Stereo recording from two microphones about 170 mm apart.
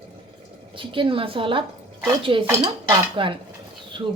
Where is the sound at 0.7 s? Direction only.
30° right (ahead or behind).